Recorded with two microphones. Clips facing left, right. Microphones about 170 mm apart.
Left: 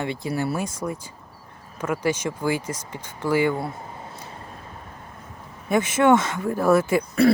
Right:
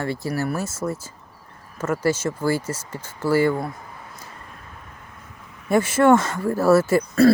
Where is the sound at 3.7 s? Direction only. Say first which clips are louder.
Left 2 dB; 25° left (ahead or behind).